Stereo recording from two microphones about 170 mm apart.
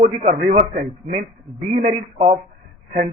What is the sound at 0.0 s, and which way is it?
A man's voice, 45° right (ahead or behind).